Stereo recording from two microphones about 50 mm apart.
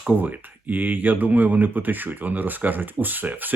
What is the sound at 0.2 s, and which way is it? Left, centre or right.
Speech, right.